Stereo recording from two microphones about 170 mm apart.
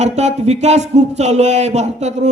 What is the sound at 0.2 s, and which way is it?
A man's voice, 40° right (ahead or behind).